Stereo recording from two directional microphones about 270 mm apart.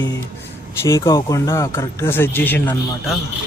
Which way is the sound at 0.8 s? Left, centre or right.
Centre.